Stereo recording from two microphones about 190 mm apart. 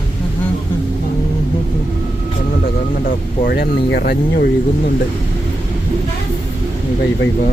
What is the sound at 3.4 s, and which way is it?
Speech, 55° left (ahead or behind).